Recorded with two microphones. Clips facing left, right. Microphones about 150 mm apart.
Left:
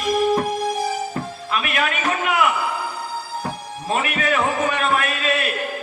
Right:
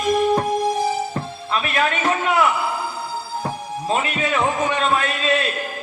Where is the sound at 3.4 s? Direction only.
25° right (ahead or behind).